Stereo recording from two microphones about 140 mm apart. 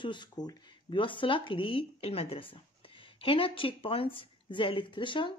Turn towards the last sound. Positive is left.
turn(degrees=35)  # may be behind; listen again after turning